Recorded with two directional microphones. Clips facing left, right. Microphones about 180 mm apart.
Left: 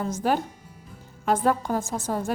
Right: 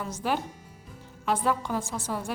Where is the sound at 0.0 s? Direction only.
45° left (ahead or behind).